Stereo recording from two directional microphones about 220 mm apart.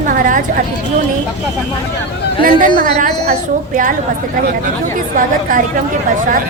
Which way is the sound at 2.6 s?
20° left (ahead or behind).